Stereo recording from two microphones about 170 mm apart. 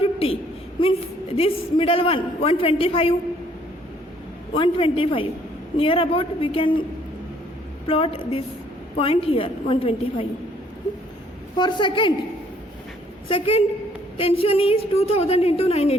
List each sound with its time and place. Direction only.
0.0 s a sound: 35° left (ahead or behind)
0.8 s a man's voice: 35° left (ahead or behind)
4.5 s a man's voice: 30° left (ahead or behind)
7.9 s a man's voice: 35° left (ahead or behind)
11.5 s a woman's voice: 25° left (ahead or behind)
13.2 s a man's voice: 35° left (ahead or behind)